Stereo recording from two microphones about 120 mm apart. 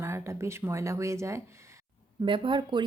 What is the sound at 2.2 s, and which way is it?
Speech, 45° right (ahead or behind).